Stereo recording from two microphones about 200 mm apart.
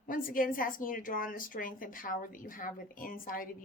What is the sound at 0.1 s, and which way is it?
A woman's voice, 45° left (ahead or behind).